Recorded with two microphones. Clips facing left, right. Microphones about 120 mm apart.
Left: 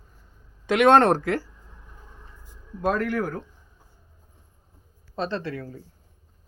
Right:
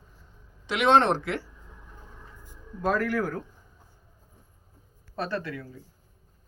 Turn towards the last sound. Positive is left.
turn(degrees=30)  # may be behind; listen again after turning